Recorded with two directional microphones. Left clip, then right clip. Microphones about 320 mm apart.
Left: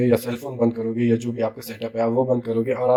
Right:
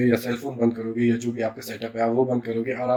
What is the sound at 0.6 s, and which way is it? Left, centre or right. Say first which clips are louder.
A man's voice: left 2 dB; centre.